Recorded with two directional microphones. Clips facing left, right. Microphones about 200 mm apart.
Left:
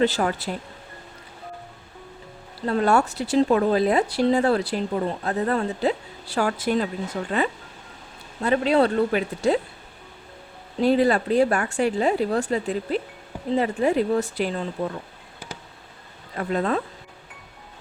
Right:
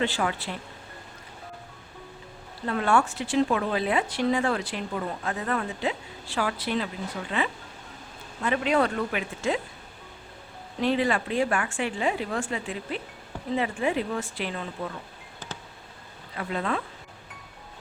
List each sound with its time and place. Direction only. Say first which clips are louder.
0.0 s speech: left 6 dB; 40° left (ahead or behind)
2.6 s speech: left 4 dB; 35° left (ahead or behind)
10.8 s speech: left 6 dB; 40° left (ahead or behind)
16.3 s speech: left 6 dB; 45° left (ahead or behind)